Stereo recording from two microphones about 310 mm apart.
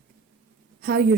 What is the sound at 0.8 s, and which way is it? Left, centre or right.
Speech, right.